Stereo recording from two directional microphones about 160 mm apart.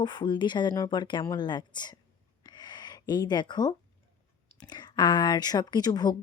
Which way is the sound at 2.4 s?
25° left (ahead or behind).